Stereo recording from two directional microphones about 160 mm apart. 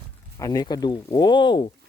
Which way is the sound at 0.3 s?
25° left (ahead or behind).